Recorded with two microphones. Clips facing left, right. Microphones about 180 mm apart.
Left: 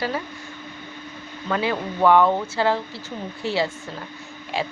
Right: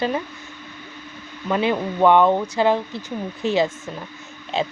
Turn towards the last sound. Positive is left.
turn(degrees=-20)  # may be behind; listen again after turning